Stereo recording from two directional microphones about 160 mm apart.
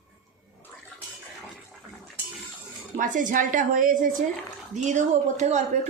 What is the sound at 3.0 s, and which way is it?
A woman's voice, 55° right (ahead or behind).